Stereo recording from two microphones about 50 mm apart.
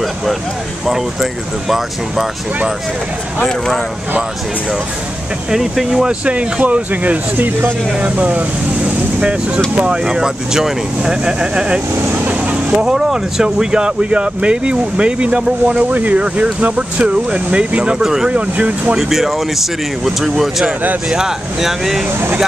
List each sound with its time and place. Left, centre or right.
0.8 s speech: centre
3.4 s speech: centre
5.5 s speech: centre
6.0 s speech: right
12.1 s vehicle: right
12.8 s speech: centre
18.0 s speech: centre
18.3 s speech: right
18.9 s speech: centre